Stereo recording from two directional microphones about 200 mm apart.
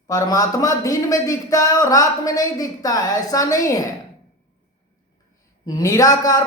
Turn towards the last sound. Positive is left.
turn(degrees=15)  # may be behind; listen again after turning